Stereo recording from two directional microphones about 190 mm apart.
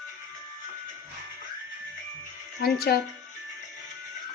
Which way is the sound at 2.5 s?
55° left (ahead or behind).